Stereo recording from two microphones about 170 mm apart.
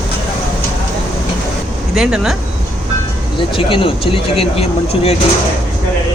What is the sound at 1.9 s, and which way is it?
Speech, 5° right (ahead or behind).